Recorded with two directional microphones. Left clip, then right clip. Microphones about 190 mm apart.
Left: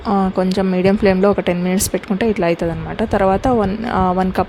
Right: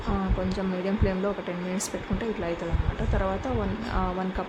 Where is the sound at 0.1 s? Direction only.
45° left (ahead or behind).